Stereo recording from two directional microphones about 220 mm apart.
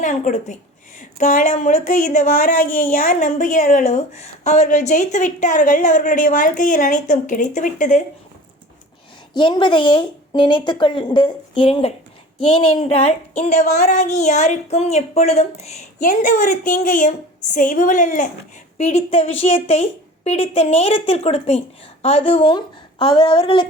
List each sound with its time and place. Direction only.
0.0 s speech: 35° left (ahead or behind)
9.3 s a woman's voice: 20° left (ahead or behind)